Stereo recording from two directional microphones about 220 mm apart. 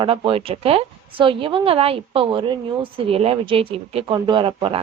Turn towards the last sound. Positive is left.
turn(degrees=-25)  # may be behind; listen again after turning